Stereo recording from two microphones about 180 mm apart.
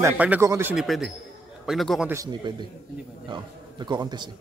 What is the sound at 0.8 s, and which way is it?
A man's voice, centre (ahead or behind).